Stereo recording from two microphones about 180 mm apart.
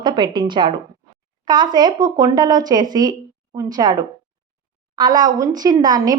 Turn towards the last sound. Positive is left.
turn(degrees=-20)  # may be behind; listen again after turning